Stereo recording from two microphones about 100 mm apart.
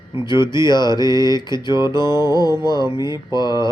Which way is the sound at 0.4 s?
50° left (ahead or behind).